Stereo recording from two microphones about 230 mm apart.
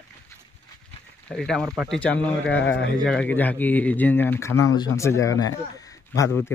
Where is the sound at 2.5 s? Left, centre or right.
Left.